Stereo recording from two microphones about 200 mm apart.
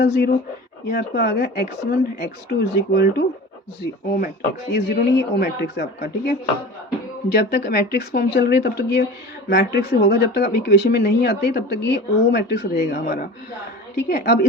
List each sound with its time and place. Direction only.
0.0 s speech: 55° left (ahead or behind)
4.7 s a woman's voice: 50° left (ahead or behind)